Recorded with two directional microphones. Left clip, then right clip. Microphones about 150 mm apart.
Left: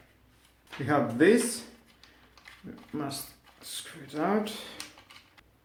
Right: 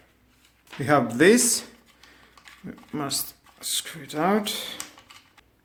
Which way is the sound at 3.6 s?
75° right (ahead or behind).